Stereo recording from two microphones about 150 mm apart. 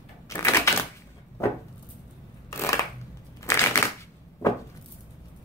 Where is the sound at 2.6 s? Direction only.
20° left (ahead or behind).